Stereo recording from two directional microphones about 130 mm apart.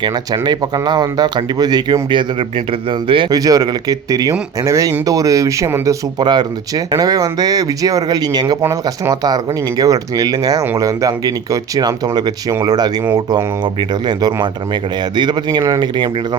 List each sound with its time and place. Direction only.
0.0 s speech: 35° right (ahead or behind)
3.3 s speech: 30° right (ahead or behind)